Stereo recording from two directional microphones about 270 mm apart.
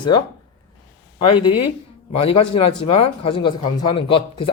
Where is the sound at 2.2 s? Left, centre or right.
Left.